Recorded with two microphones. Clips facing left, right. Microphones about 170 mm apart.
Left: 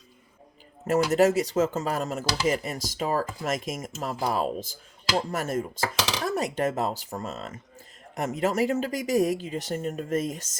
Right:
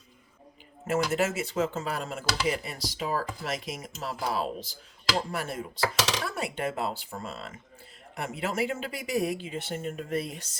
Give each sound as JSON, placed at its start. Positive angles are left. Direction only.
{"t": 0.9, "sound": "speech", "side_deg": 40}